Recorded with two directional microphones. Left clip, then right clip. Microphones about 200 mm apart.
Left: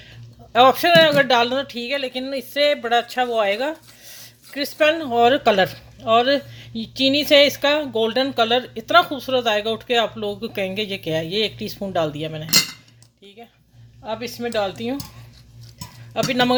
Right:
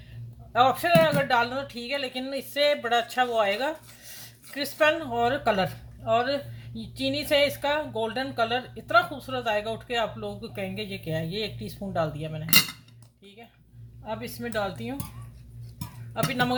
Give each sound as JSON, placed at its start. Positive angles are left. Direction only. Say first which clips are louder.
{"t": 0.5, "sound": "speech", "louder": "left 7 dB", "side_deg": 45}
{"t": 14.0, "sound": "speech", "louder": "left 7 dB", "side_deg": 40}
{"t": 16.1, "sound": "speech", "louder": "left 8 dB", "side_deg": 40}